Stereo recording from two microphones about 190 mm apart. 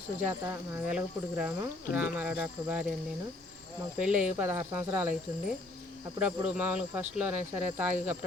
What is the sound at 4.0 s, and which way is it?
Speech, 5° right (ahead or behind).